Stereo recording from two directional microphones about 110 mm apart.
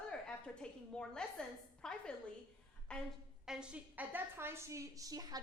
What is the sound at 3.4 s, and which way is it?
A woman's voice, 5° right (ahead or behind).